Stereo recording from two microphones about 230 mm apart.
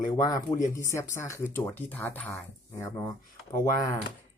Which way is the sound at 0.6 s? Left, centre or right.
Centre.